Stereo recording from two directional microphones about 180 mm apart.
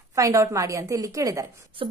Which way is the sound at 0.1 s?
15° right (ahead or behind).